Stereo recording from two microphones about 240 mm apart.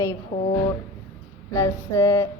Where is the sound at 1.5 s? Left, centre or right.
Centre.